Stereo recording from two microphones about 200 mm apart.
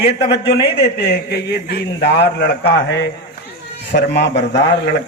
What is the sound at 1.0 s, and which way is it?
A man's voice, 55° left (ahead or behind).